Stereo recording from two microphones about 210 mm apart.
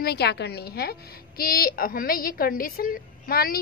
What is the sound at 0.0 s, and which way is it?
A woman's voice, 50° left (ahead or behind).